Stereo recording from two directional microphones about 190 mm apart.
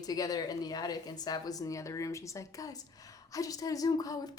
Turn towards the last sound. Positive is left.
turn(degrees=20)  # may be behind; listen again after turning